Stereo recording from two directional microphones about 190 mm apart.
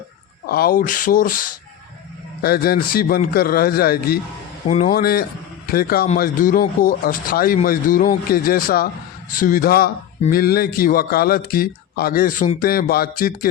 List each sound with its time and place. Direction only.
0.4 s speech: 55° left (ahead or behind)